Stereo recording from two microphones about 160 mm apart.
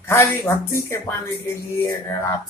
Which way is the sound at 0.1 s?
15° left (ahead or behind).